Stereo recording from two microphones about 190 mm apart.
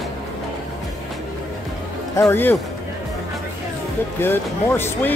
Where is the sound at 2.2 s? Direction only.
10° left (ahead or behind).